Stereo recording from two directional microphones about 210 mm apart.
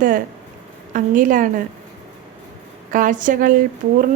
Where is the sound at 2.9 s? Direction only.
40° right (ahead or behind).